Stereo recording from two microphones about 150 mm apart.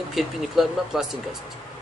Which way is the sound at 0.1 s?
Centre (ahead or behind).